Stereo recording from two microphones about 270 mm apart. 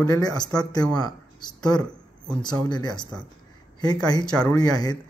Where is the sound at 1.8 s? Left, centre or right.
Centre.